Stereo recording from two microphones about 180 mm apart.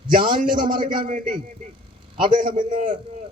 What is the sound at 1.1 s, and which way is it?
Speech, 45° right (ahead or behind).